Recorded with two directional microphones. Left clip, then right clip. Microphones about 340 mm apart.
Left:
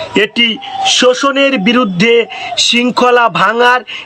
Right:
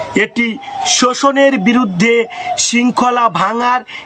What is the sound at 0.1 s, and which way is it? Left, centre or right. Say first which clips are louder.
Speech: left 5 dB; centre.